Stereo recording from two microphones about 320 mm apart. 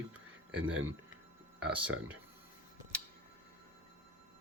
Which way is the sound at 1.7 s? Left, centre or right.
Centre.